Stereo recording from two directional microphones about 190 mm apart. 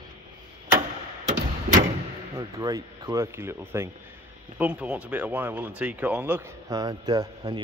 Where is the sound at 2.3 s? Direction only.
20° right (ahead or behind).